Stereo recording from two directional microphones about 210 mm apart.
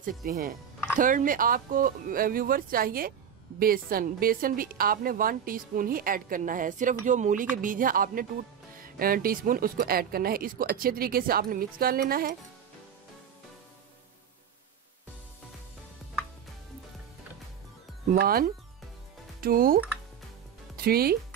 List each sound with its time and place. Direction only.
0.2 s a woman's voice: 45° right (ahead or behind)
18.2 s a woman's voice: 45° right (ahead or behind)